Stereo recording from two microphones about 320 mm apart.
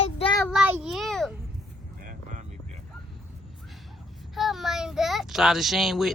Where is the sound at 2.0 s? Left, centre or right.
Right.